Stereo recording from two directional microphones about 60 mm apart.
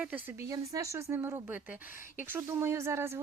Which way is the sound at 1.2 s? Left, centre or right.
Right.